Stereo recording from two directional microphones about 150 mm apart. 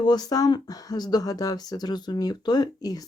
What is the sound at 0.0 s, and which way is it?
Speech, 25° left (ahead or behind).